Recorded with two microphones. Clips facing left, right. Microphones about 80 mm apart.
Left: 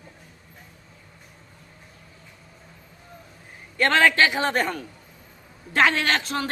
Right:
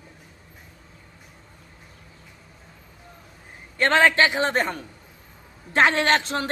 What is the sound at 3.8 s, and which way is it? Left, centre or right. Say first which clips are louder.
A man's voice: right 1 dB; right.